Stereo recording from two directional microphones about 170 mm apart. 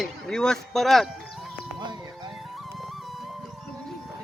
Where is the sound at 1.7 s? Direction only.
25° right (ahead or behind).